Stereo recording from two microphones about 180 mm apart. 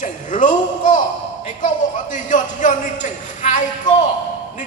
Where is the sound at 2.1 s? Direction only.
45° left (ahead or behind).